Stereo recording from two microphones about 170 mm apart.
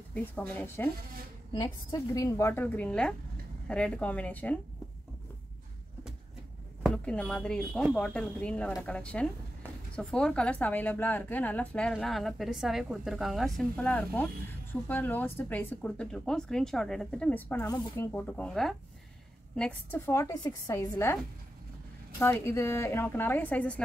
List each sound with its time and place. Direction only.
0.1 s a woman's voice: 10° left (ahead or behind)
1.5 s a woman's voice: 25° left (ahead or behind)
6.8 s a woman's voice: 5° left (ahead or behind)
22.2 s a woman's voice: 15° left (ahead or behind)